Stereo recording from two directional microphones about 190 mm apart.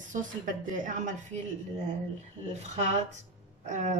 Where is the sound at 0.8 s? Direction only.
40° right (ahead or behind).